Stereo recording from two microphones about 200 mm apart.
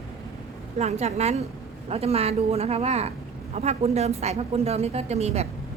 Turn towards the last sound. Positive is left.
turn(degrees=-30)  # may be behind; listen again after turning